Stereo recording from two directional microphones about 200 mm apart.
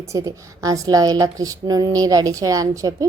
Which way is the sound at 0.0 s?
15° right (ahead or behind).